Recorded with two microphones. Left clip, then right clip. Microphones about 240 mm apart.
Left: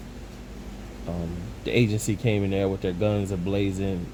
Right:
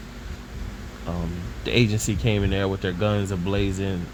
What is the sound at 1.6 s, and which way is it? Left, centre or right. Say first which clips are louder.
Speech: right 2 dB; right.